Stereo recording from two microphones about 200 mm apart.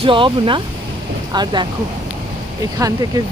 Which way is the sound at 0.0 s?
25° right (ahead or behind).